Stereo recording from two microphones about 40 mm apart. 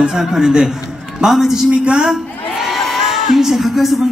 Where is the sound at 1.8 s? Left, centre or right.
Centre.